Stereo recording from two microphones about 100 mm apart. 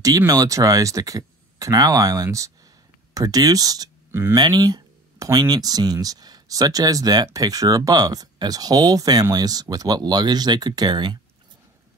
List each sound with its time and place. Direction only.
0.3 s speech: 35° right (ahead or behind)
4.1 s speech: 25° right (ahead or behind)
4.4 s speech: 45° right (ahead or behind)